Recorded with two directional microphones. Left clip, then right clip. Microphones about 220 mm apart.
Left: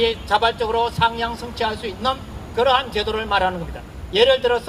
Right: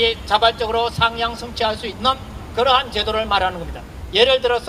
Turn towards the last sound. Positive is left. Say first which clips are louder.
# right 1 dB
turn(degrees=-30)  # may be behind; listen again after turning